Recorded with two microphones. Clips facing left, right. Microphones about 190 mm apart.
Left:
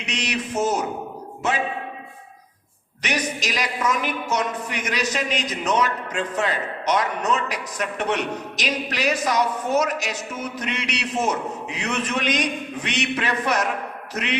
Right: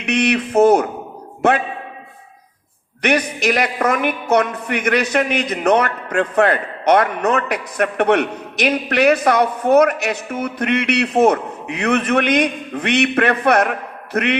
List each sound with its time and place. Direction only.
0.0 s a woman's voice: 60° right (ahead or behind)
3.0 s a woman's voice: 60° right (ahead or behind)